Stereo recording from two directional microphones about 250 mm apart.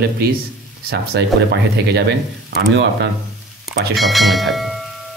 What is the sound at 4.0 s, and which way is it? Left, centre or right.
Speech, centre.